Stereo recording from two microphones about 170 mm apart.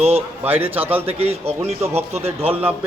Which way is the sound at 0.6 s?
35° right (ahead or behind).